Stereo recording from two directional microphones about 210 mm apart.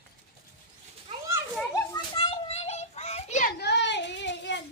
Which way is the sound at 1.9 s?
25° left (ahead or behind).